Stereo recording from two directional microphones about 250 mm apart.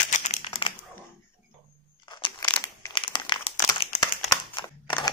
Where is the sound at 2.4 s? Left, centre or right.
Centre.